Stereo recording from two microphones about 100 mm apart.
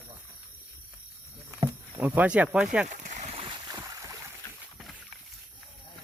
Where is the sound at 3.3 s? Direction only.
70° right (ahead or behind).